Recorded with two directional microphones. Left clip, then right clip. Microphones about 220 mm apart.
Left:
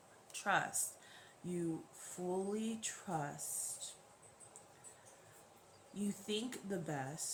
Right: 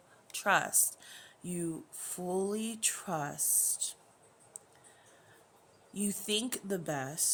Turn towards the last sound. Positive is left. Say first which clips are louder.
# right 7 dB
turn(degrees=-55)  # may be behind; listen again after turning